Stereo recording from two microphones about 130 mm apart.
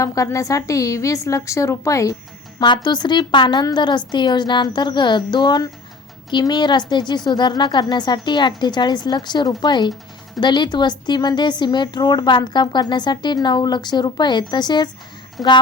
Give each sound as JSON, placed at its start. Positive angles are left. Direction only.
{"t": 0.0, "sound": "a woman's voice", "side_deg": 25}
{"t": 2.6, "sound": "a woman's voice", "side_deg": 35}
{"t": 15.4, "sound": "speech", "side_deg": 5}